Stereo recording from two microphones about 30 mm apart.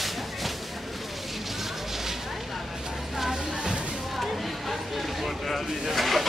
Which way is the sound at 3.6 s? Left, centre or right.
Right.